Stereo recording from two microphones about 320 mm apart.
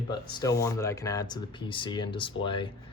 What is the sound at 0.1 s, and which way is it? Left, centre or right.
Speech, centre.